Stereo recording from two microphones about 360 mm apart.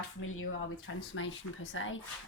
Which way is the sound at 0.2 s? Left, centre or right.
Left.